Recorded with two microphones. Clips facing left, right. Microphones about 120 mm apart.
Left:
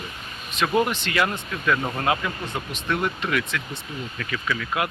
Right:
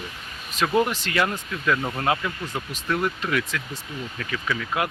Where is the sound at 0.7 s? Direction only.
20° left (ahead or behind).